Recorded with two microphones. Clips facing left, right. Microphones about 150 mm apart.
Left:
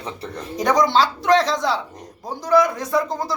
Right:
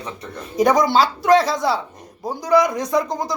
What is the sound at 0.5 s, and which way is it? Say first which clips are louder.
Speech: right 2 dB; 10° right (ahead or behind).